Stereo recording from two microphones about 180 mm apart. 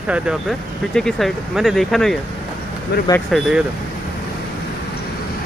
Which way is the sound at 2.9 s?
65° left (ahead or behind).